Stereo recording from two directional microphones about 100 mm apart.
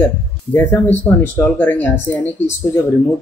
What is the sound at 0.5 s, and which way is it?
Speech, 20° left (ahead or behind).